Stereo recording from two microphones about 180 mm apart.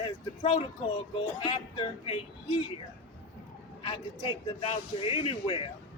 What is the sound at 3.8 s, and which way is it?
A man's voice, 30° left (ahead or behind).